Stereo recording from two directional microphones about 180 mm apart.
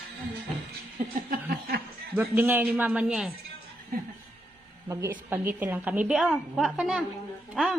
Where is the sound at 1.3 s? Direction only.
55° right (ahead or behind).